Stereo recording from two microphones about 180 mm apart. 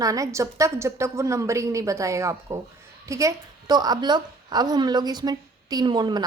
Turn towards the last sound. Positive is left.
turn(degrees=-25)  # may be behind; listen again after turning